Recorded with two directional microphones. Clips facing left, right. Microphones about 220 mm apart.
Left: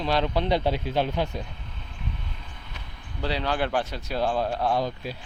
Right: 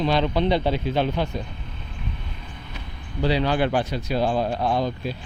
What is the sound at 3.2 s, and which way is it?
Speech, centre (ahead or behind).